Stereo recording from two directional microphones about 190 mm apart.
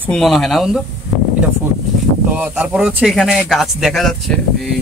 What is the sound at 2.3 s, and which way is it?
Speech, 5° right (ahead or behind).